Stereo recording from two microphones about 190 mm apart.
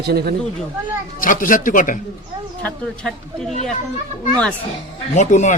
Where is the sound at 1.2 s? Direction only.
45° left (ahead or behind).